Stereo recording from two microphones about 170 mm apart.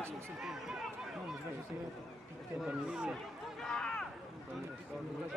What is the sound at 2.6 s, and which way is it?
Speech, 5° right (ahead or behind).